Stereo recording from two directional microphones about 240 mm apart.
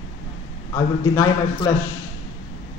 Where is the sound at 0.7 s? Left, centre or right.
Centre.